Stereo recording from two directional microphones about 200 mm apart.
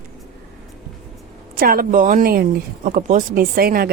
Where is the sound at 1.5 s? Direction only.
50° right (ahead or behind).